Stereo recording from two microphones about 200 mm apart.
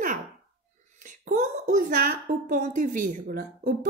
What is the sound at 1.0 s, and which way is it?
A woman's voice, 40° right (ahead or behind).